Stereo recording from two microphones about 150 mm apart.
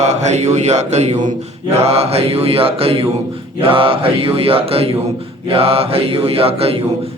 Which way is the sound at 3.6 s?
40° right (ahead or behind).